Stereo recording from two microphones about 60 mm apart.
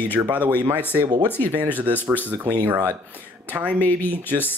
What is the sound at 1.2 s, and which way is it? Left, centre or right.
Speech, left.